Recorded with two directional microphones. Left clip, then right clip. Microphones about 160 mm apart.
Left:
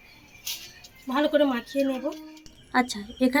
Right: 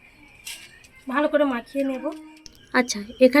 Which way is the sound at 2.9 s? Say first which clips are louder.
Right 9 dB; 15° right (ahead or behind).